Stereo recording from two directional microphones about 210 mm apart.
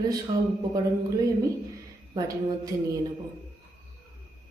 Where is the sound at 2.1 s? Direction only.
15° right (ahead or behind).